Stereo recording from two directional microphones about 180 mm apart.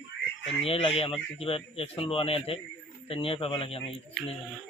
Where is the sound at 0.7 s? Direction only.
30° left (ahead or behind).